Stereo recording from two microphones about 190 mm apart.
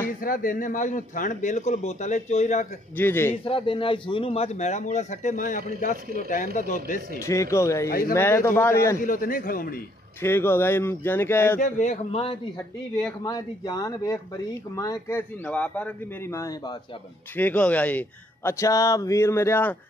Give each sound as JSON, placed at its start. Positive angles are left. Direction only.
{"t": 0.2, "sound": "a man's voice", "side_deg": 45}
{"t": 3.0, "sound": "speech", "side_deg": 10}
{"t": 3.4, "sound": "a man's voice", "side_deg": 25}
{"t": 7.2, "sound": "speech", "side_deg": 15}
{"t": 9.0, "sound": "a man's voice", "side_deg": 45}
{"t": 10.2, "sound": "speech", "side_deg": 10}
{"t": 11.6, "sound": "a man's voice", "side_deg": 40}
{"t": 13.2, "sound": "speech", "side_deg": 20}